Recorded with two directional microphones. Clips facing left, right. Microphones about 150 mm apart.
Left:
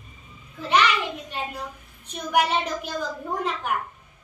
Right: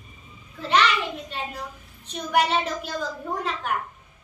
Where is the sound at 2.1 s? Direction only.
10° left (ahead or behind).